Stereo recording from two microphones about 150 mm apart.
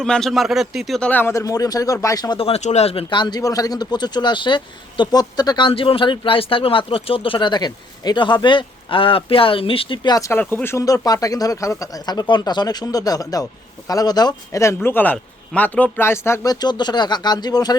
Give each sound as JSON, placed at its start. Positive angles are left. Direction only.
{"t": 0.0, "sound": "a man's voice", "side_deg": 5}
{"t": 2.4, "sound": "speech", "side_deg": 45}